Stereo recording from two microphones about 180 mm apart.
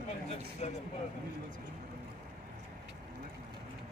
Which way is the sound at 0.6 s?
35° left (ahead or behind).